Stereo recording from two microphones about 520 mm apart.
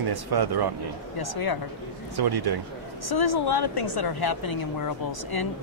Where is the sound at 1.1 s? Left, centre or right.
Left.